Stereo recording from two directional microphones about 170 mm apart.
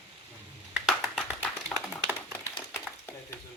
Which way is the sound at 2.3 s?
15° left (ahead or behind).